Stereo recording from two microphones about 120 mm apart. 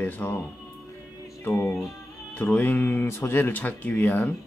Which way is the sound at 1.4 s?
20° left (ahead or behind).